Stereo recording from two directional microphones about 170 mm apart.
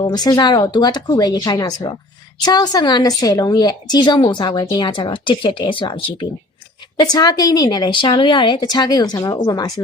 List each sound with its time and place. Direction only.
0.0 s a woman's voice: 25° left (ahead or behind)